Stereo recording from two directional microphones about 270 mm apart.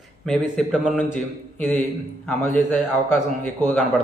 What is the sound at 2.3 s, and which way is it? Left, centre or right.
A man's voice, centre.